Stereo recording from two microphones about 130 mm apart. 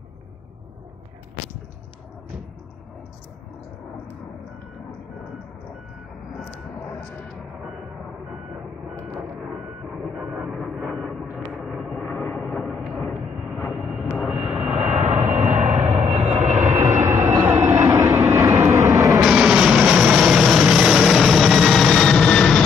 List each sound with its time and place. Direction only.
10.1 s vehicle: 5° right (ahead or behind)
14.1 s aircraft: 5° right (ahead or behind)
14.8 s vehicle: 65° right (ahead or behind)
16.9 s vehicle: 20° right (ahead or behind)
19.2 s vehicle: 5° right (ahead or behind)